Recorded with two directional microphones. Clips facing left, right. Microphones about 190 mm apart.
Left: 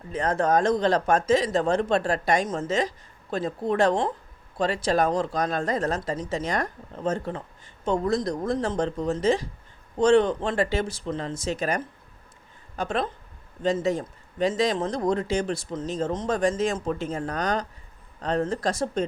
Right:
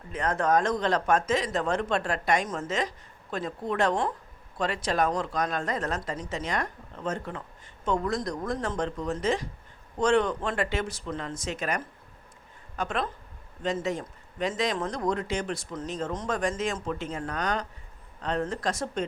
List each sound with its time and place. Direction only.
0.1 s speech: 30° left (ahead or behind)